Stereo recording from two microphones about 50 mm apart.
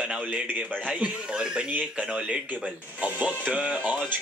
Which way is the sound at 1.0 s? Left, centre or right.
Centre.